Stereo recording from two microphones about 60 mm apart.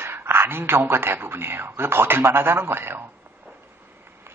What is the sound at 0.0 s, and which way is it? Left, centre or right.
Speech, right.